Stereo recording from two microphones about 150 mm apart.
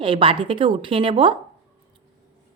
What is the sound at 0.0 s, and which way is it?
A woman's voice, 35° right (ahead or behind).